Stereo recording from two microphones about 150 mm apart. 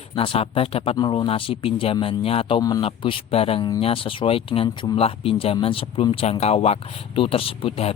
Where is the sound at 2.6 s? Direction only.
25° left (ahead or behind).